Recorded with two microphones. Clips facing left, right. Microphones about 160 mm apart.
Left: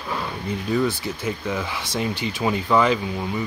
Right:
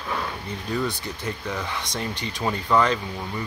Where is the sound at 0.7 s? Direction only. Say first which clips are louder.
Left 4 dB; 5° left (ahead or behind).